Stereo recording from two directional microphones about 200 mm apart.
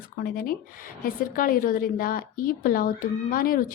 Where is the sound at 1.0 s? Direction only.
45° left (ahead or behind).